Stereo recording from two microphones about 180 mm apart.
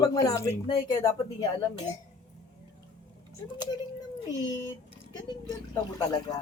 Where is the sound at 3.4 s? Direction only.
25° left (ahead or behind).